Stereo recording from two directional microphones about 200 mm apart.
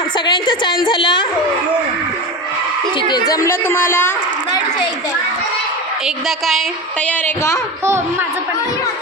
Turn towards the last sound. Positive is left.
turn(degrees=5)  # may be behind; listen again after turning